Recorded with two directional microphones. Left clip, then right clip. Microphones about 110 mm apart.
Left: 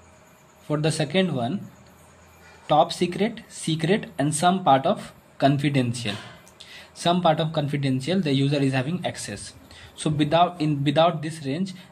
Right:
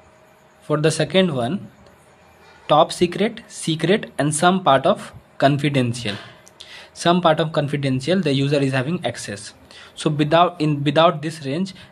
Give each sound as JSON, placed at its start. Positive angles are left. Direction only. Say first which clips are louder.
{"t": 0.7, "sound": "speech", "louder": "right 6 dB", "side_deg": -50}
{"t": 2.6, "sound": "speech", "louder": "right 4 dB", "side_deg": -50}